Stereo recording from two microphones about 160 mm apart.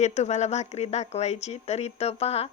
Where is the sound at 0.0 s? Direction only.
45° left (ahead or behind).